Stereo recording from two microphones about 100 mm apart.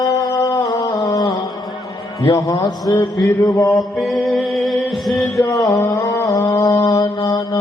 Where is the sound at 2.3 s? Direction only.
35° left (ahead or behind).